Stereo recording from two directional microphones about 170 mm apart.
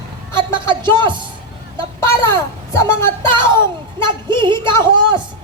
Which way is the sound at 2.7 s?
15° left (ahead or behind).